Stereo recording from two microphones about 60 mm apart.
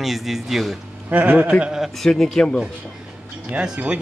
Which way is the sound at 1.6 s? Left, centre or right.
Centre.